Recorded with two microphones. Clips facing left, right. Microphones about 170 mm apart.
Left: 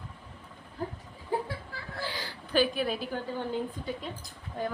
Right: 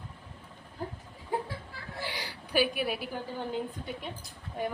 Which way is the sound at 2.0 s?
15° right (ahead or behind).